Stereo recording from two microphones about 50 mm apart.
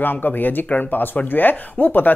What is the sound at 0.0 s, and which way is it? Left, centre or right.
Speech, left.